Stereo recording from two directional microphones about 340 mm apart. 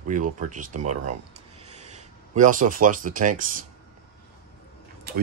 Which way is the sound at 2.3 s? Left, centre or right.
Right.